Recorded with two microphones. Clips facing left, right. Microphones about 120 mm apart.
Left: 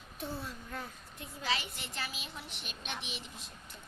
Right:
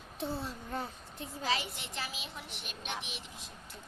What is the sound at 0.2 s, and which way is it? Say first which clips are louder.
A child's voice: right 3 dB; 25° right (ahead or behind).